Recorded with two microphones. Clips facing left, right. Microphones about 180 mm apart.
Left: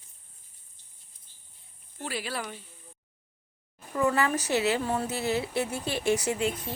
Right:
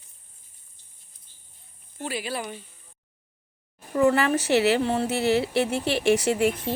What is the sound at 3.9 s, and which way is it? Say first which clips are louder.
Speech: right 5 dB; 30° right (ahead or behind).